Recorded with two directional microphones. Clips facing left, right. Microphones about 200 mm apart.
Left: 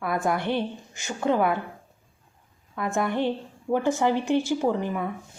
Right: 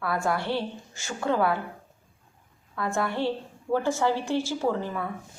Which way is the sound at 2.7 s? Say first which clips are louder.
Left 2 dB; 20° left (ahead or behind).